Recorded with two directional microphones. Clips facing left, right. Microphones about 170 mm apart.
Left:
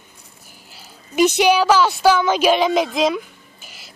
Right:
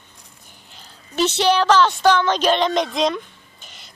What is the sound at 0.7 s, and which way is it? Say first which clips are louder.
A woman's voice: left 4 dB; 10° left (ahead or behind).